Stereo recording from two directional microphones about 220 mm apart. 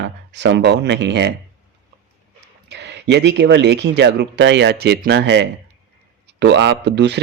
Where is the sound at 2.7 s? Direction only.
50° right (ahead or behind).